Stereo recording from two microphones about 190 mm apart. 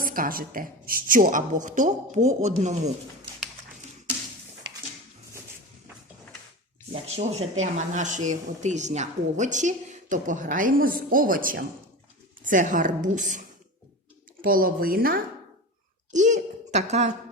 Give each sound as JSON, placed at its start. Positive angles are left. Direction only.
{"t": 0.0, "sound": "a woman's voice", "side_deg": -50}
{"t": 6.9, "sound": "a woman's voice", "side_deg": -35}
{"t": 14.4, "sound": "a woman's voice", "side_deg": -50}
{"t": 16.1, "sound": "a child's voice", "side_deg": -40}